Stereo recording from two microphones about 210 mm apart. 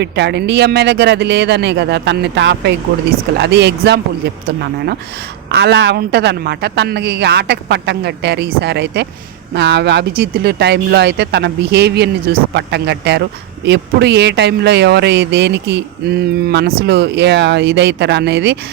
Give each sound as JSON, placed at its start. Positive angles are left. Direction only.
{"t": 0.0, "sound": "speech", "side_deg": -55}
{"t": 5.5, "sound": "speech", "side_deg": -50}